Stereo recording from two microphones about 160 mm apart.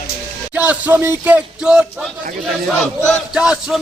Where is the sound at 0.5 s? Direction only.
10° right (ahead or behind).